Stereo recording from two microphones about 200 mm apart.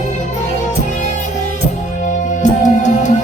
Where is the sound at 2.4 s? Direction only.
40° left (ahead or behind).